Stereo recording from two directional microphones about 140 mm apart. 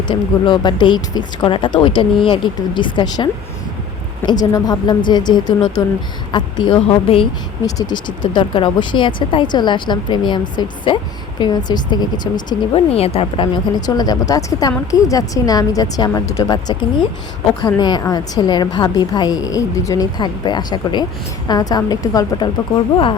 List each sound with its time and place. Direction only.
0.1 s speech: 35° left (ahead or behind)
4.3 s speech: 30° left (ahead or behind)
7.6 s speech: 25° left (ahead or behind)
12.7 s a woman's voice: 45° left (ahead or behind); by 22.4 s 25° left (ahead or behind)